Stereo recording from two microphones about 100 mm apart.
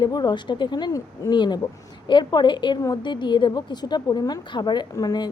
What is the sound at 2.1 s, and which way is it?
Speech, 50° left (ahead or behind).